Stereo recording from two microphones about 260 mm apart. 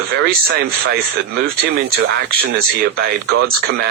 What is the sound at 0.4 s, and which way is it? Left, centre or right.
Speech, right.